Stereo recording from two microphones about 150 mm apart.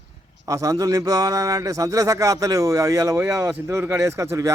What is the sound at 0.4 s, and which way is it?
Speech, 20° right (ahead or behind).